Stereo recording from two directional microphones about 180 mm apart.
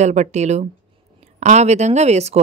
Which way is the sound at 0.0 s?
40° right (ahead or behind).